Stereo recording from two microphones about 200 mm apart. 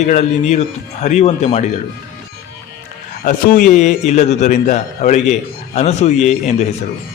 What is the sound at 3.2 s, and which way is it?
A man's voice, 45° left (ahead or behind).